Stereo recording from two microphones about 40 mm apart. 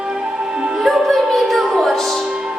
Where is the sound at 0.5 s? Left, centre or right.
Centre.